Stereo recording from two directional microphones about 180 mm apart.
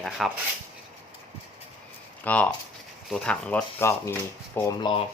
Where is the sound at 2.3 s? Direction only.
10° left (ahead or behind).